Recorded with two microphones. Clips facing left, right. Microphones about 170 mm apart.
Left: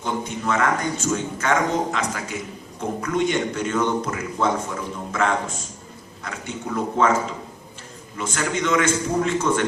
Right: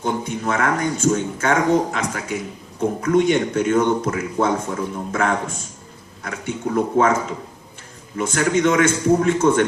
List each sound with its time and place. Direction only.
0.0 s a man's voice: 50° right (ahead or behind)
8.2 s a man's voice: 55° right (ahead or behind)